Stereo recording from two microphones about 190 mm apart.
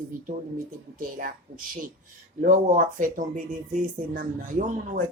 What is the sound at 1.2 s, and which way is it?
Speech, 45° right (ahead or behind).